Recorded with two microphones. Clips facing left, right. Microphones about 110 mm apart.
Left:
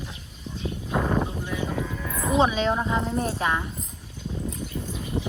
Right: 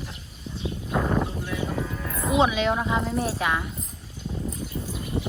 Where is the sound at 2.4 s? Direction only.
35° left (ahead or behind).